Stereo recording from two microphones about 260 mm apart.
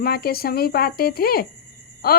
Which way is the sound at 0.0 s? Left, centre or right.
Left.